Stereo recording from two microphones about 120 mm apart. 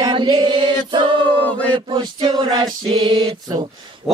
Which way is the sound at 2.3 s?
35° right (ahead or behind).